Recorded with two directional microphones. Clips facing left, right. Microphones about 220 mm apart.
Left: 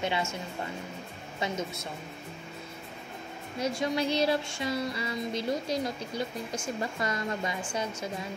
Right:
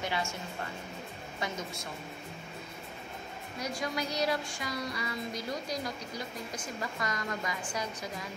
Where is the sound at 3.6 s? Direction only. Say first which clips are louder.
Left 6 dB; 25° left (ahead or behind).